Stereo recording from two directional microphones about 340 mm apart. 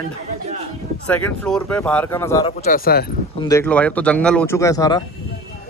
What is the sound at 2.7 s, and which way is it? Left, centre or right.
Speech, left.